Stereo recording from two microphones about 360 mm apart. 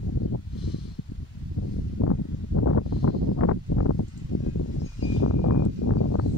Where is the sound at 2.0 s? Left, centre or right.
Left.